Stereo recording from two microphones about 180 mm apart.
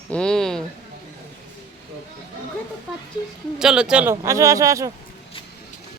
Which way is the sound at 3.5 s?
5° right (ahead or behind).